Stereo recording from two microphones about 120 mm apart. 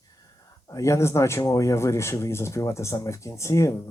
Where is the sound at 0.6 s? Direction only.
25° left (ahead or behind).